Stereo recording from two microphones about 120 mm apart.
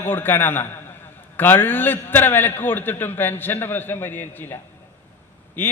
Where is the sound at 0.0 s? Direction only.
15° left (ahead or behind).